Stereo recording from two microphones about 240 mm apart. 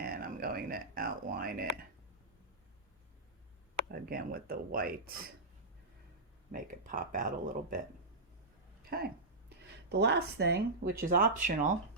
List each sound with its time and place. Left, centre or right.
0.0 s speech: right
3.8 s speech: right
6.5 s speech: right
8.8 s a sound: right
9.9 s speech: right